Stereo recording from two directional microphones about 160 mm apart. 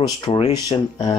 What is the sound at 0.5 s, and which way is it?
Speech, 25° left (ahead or behind).